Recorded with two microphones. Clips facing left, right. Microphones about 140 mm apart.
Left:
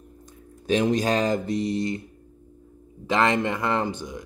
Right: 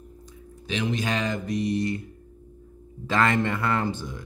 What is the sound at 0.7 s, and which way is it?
Speech, 40° left (ahead or behind).